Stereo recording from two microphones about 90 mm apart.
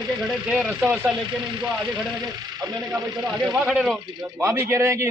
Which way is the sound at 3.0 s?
50° right (ahead or behind).